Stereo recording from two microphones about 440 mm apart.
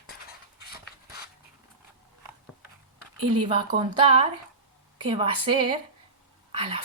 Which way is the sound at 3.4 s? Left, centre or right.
Centre.